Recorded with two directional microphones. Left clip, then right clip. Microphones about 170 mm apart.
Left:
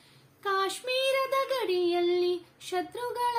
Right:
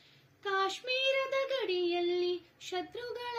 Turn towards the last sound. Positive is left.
turn(degrees=15)  # may be behind; listen again after turning